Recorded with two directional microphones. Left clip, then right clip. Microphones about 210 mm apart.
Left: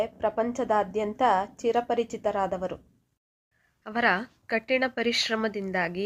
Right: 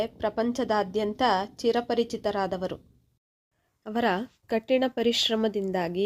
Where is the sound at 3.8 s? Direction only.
40° right (ahead or behind).